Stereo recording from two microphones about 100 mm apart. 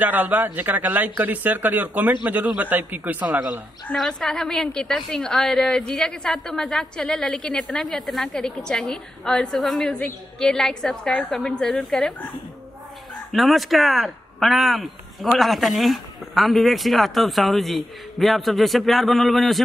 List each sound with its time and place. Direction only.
0.0 s a man's voice: 15° right (ahead or behind)
3.9 s a woman's voice: 5° left (ahead or behind)
13.3 s a woman's voice: centre (ahead or behind)